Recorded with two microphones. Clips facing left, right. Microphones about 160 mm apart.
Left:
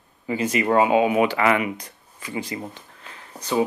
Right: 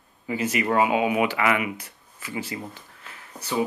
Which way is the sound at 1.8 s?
35° left (ahead or behind).